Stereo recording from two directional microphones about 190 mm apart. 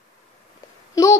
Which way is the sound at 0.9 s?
15° left (ahead or behind).